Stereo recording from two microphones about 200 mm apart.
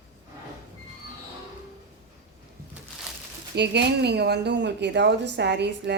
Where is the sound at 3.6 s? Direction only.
60° right (ahead or behind).